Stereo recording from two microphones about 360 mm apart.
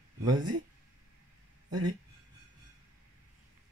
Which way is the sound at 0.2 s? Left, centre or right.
Centre.